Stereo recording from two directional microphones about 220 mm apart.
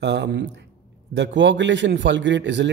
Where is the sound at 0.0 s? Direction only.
55° right (ahead or behind).